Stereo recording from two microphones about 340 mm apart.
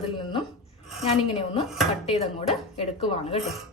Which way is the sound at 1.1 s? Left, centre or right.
Centre.